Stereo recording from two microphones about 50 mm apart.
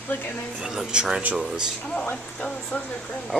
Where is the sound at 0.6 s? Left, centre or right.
Centre.